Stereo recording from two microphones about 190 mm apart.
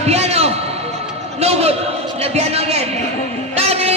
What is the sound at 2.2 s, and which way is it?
Speech, 35° right (ahead or behind).